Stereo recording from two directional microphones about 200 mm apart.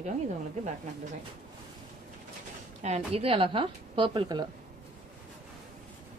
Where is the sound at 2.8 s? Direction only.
35° right (ahead or behind).